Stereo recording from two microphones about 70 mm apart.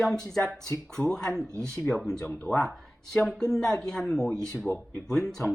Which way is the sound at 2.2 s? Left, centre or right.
Left.